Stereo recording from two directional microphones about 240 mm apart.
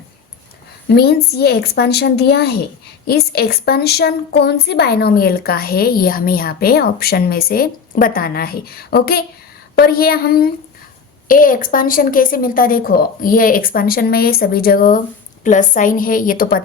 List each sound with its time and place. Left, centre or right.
0.9 s a woman's voice: left